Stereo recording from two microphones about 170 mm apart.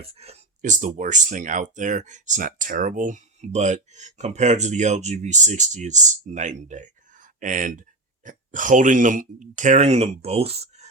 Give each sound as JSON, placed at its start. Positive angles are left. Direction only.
{"t": 0.1, "sound": "speech", "side_deg": -35}